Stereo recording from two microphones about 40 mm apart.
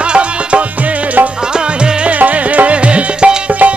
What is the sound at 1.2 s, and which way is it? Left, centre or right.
Music, right.